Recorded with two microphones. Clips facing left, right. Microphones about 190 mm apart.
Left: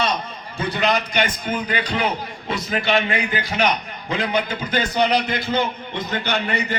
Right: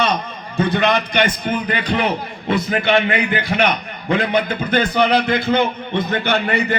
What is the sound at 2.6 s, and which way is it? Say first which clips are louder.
A man's voice: right 3 dB; 55° right (ahead or behind).